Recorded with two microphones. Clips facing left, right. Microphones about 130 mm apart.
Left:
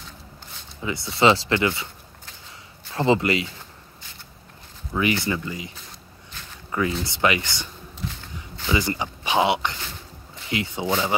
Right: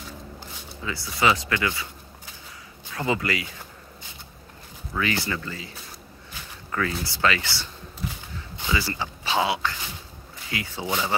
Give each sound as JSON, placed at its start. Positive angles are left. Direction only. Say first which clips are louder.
{"t": 0.8, "sound": "speech", "louder": "left 4 dB", "side_deg": 25}
{"t": 2.9, "sound": "speech", "louder": "left 6 dB", "side_deg": 25}
{"t": 4.9, "sound": "speech", "louder": "left 4 dB", "side_deg": 20}
{"t": 6.7, "sound": "speech", "louder": "left 3 dB", "side_deg": 15}
{"t": 8.6, "sound": "speech", "louder": "left 4 dB", "side_deg": 20}